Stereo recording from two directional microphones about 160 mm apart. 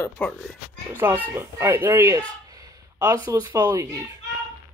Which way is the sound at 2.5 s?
20° right (ahead or behind).